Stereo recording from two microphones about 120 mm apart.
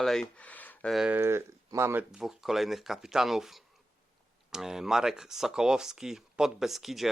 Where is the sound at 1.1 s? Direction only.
20° right (ahead or behind).